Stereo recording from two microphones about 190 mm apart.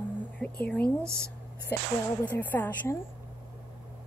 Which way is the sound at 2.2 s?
10° left (ahead or behind).